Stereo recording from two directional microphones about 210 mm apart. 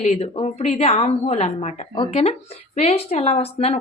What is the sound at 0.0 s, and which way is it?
A woman's voice, 30° left (ahead or behind).